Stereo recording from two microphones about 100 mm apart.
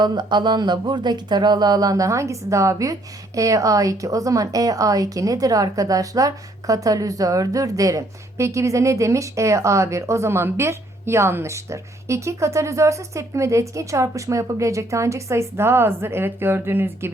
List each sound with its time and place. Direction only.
0.0 s speech: 45° right (ahead or behind); by 17.1 s 25° right (ahead or behind)